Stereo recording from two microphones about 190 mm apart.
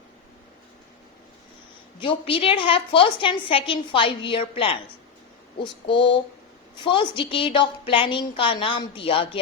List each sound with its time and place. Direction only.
2.0 s a woman's voice: 25° left (ahead or behind)